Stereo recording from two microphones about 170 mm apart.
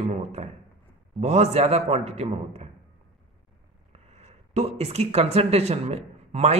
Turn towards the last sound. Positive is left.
turn(degrees=-40)  # may be behind; listen again after turning